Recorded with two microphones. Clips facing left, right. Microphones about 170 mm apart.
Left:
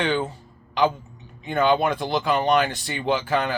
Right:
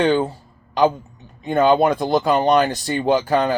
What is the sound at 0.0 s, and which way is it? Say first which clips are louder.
Speech: right 6 dB; 40° right (ahead or behind).